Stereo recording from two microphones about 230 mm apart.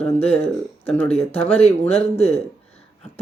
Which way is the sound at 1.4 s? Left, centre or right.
Centre.